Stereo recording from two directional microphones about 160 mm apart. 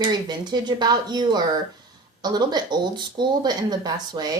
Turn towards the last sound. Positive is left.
turn(degrees=-25)  # may be behind; listen again after turning